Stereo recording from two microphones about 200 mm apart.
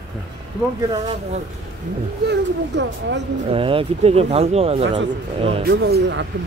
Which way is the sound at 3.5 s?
25° right (ahead or behind).